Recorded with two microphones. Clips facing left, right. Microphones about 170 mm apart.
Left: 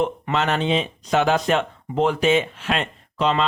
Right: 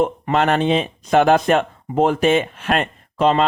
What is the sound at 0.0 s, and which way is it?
Speech, 50° right (ahead or behind).